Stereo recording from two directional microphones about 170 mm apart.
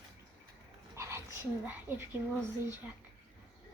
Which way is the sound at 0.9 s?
15° right (ahead or behind).